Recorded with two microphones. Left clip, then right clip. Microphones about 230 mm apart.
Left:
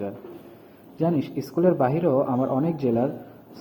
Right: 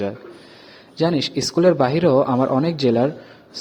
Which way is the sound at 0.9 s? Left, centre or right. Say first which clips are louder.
Right 5 dB; right.